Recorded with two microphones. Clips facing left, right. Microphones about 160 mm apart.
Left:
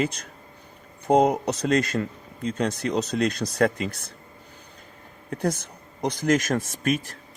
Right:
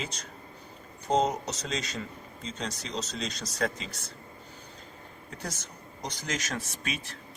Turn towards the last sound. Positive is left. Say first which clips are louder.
# left 11 dB
turn(degrees=45)  # may be behind; listen again after turning